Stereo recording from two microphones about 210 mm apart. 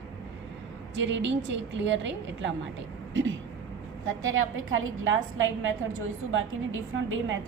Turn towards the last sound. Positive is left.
turn(degrees=-70)  # may be behind; listen again after turning